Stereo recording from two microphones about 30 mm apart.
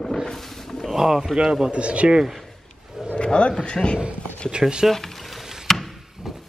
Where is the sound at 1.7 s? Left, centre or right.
Right.